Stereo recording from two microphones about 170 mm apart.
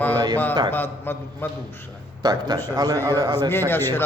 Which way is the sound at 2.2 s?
25° right (ahead or behind).